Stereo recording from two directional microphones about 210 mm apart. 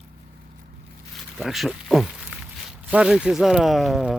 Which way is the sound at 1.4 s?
Centre (ahead or behind).